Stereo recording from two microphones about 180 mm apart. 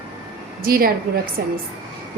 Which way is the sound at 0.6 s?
55° right (ahead or behind).